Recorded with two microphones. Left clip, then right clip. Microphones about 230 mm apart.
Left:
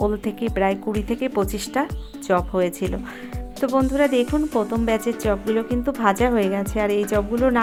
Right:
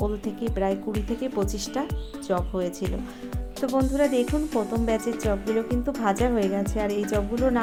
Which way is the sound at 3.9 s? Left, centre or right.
Left.